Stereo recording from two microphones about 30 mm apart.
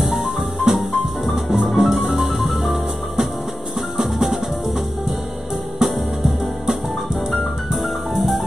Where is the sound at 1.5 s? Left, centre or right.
Centre.